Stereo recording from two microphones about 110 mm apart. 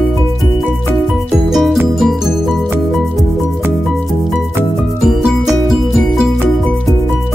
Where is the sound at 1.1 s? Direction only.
Centre (ahead or behind).